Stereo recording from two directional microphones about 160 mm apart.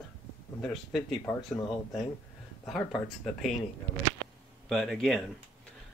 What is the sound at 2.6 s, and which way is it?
Speech, centre (ahead or behind).